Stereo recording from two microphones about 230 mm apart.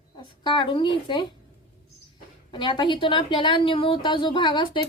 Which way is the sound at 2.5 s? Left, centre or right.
Centre.